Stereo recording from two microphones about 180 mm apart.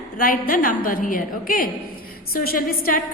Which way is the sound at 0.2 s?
50° left (ahead or behind).